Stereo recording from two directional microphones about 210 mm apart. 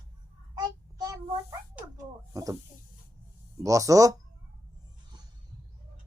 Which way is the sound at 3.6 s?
15° right (ahead or behind).